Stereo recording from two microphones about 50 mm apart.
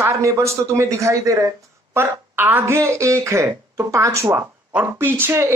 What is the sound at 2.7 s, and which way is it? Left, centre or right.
Speech, right.